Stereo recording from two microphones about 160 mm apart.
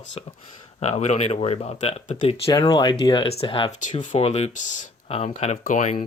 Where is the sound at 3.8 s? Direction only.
50° left (ahead or behind).